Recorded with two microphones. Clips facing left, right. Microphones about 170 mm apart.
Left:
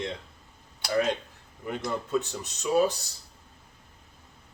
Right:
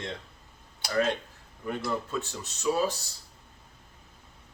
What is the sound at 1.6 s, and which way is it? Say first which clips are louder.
A man's voice: even; 15° left (ahead or behind).